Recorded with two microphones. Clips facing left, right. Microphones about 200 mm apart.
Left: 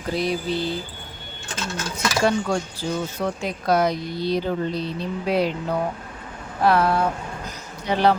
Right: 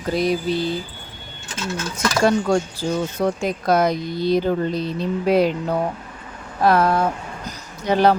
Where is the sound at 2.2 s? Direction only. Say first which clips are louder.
Right 5 dB; 45° right (ahead or behind).